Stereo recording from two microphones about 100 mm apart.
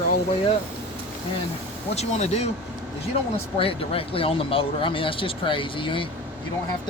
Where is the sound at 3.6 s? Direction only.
70° left (ahead or behind).